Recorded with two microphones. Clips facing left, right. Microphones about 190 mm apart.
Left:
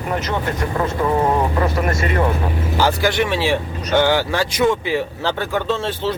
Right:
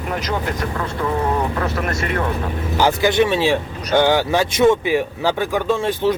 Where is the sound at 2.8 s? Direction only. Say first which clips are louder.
Right 3 dB; 20° right (ahead or behind).